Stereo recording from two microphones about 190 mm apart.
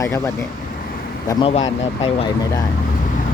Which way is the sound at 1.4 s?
30° left (ahead or behind).